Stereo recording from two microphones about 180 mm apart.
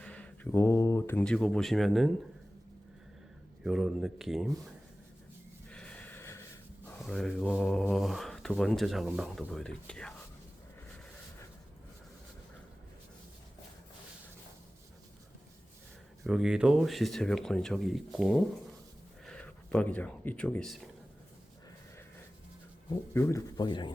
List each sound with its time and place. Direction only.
0.0 s speech: 5° left (ahead or behind)
3.6 s speech: 5° right (ahead or behind)
5.7 s snort: 5° left (ahead or behind)
7.0 s speech: 5° left (ahead or behind)
16.2 s speech: 5° right (ahead or behind)
23.1 s a man's voice: 15° left (ahead or behind)